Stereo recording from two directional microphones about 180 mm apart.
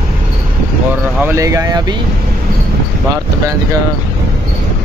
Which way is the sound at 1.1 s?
15° right (ahead or behind).